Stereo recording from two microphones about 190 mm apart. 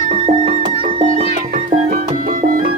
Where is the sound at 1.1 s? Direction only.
30° left (ahead or behind).